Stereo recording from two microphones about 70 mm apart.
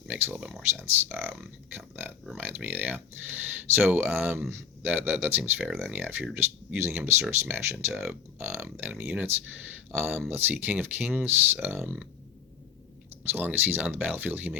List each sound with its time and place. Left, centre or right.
0.1 s speech: right
9.0 s speech: centre
9.9 s speech: right
13.2 s speech: right